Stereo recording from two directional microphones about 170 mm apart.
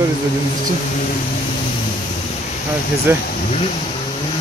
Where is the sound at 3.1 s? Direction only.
15° right (ahead or behind).